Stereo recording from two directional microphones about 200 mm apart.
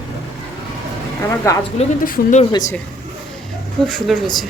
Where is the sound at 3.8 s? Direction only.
5° left (ahead or behind).